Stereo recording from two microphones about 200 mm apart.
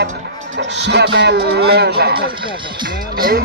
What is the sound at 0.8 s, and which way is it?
Speech, 60° right (ahead or behind).